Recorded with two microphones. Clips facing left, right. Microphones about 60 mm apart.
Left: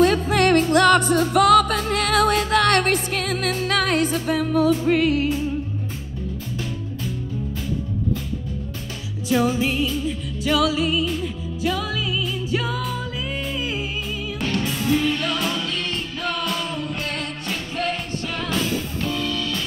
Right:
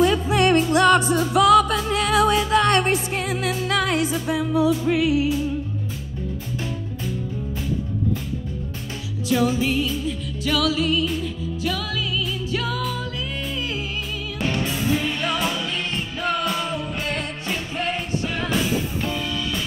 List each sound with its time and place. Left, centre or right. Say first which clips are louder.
0.0 s music: left 1 dB; left
9.3 s music: even; left
12.4 s music: left 2 dB; centre
14.4 s music: right 1 dB; centre
14.7 s music: left 2 dB; centre